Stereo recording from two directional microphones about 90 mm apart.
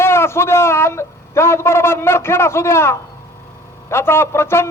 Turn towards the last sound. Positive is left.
turn(degrees=30)  # may be behind; listen again after turning